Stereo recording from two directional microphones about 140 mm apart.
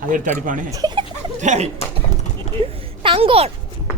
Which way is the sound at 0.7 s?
30° right (ahead or behind).